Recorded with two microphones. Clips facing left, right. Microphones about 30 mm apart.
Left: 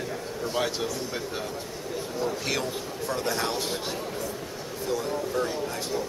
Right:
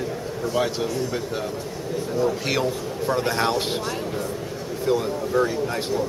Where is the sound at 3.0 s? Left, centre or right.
Right.